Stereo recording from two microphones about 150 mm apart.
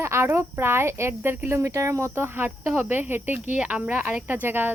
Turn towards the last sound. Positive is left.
turn(degrees=-15)  # may be behind; listen again after turning